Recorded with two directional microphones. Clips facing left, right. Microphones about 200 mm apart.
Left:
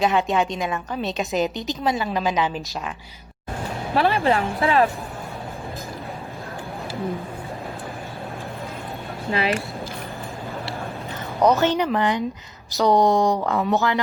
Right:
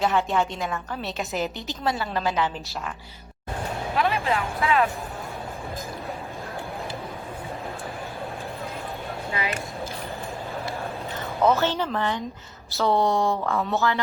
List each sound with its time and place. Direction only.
0.0 s a woman's voice: 15° left (ahead or behind)
3.9 s speech: 35° left (ahead or behind)
11.4 s a woman's voice: 15° left (ahead or behind)